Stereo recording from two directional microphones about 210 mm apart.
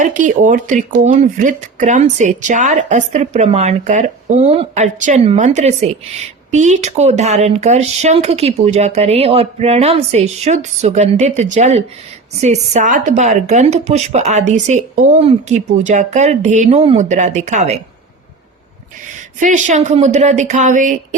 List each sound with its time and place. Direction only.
0.2 s speech: 35° right (ahead or behind)
19.4 s speech: 35° right (ahead or behind)